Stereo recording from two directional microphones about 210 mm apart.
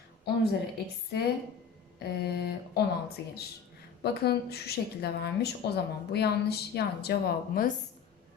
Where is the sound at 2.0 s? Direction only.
50° left (ahead or behind).